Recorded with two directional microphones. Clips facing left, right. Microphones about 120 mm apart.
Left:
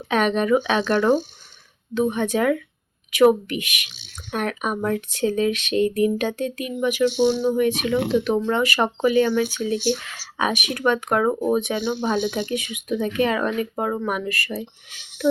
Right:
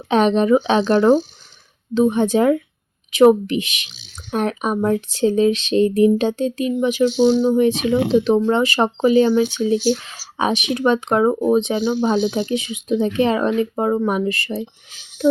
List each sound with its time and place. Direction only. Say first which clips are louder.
0.1 s speech: right 5 dB; 30° right (ahead or behind)